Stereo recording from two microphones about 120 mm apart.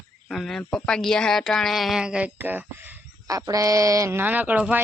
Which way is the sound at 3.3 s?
30° right (ahead or behind).